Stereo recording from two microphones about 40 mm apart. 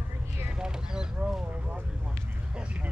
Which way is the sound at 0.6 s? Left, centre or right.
Centre.